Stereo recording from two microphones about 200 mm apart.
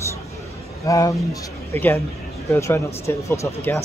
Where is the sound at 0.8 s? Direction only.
15° left (ahead or behind).